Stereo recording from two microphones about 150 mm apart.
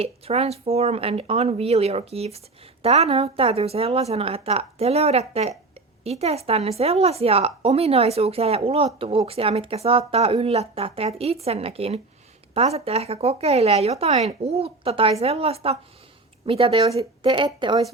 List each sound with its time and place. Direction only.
0.0 s a woman's voice: 40° right (ahead or behind)